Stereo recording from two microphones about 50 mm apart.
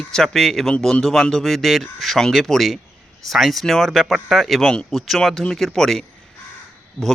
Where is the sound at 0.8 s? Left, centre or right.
Centre.